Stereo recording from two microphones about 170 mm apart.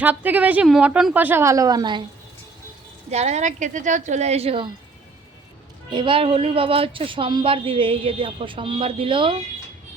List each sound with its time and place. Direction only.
0.0 s a woman's voice: 10° right (ahead or behind); by 2.0 s 25° right (ahead or behind)
3.1 s speech: 40° right (ahead or behind)
5.9 s speech: 30° right (ahead or behind)